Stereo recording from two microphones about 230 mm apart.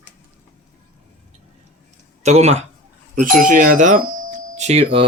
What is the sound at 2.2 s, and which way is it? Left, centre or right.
Speech, right.